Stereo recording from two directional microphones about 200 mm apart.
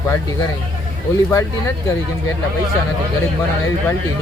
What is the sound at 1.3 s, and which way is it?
Speech, 15° left (ahead or behind).